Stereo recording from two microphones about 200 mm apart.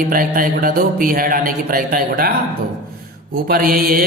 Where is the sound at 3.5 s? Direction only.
45° right (ahead or behind).